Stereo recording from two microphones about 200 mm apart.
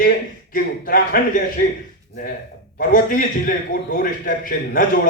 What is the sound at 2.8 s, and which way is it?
A man's voice, 45° left (ahead or behind).